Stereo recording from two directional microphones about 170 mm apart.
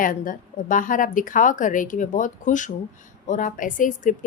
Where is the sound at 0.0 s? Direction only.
50° left (ahead or behind).